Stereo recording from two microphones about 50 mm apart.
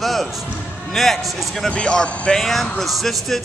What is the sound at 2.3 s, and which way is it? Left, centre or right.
Speech, centre.